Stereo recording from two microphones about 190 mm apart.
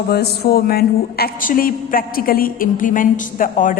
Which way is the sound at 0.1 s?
55° left (ahead or behind).